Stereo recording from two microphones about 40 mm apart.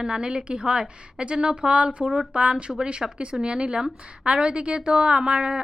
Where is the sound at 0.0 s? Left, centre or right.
Right.